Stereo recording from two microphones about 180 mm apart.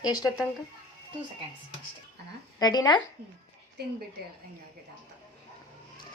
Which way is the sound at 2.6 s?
20° left (ahead or behind).